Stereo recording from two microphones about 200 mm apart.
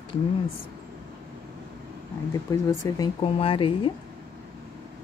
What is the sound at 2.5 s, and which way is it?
Speech, 15° left (ahead or behind).